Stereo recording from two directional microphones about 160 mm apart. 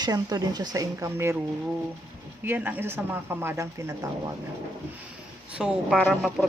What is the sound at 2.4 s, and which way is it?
Speech, 10° right (ahead or behind).